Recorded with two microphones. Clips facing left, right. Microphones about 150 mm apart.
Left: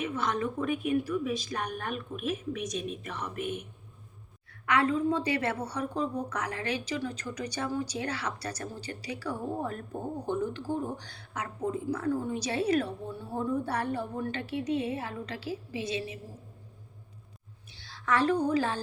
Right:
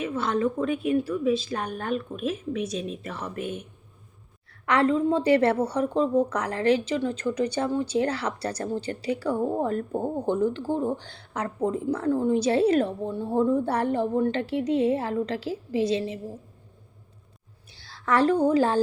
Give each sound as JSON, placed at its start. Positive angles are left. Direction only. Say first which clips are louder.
{"t": 0.0, "sound": "speech", "louder": "right 5 dB", "side_deg": -30}
{"t": 4.7, "sound": "speech", "louder": "right 5 dB", "side_deg": -30}
{"t": 17.7, "sound": "a woman's voice", "louder": "right 4 dB", "side_deg": -35}